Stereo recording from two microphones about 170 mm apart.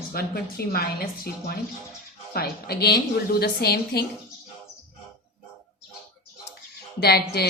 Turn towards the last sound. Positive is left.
turn(degrees=70)  # may be behind; listen again after turning